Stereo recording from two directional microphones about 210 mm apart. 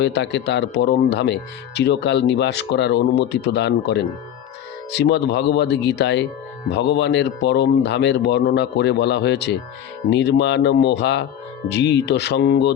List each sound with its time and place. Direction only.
0.0 s speech: 55° left (ahead or behind)